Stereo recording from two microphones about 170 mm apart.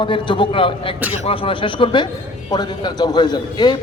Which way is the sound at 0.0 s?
30° left (ahead or behind).